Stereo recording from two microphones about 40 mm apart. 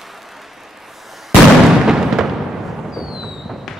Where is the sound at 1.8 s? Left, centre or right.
Centre.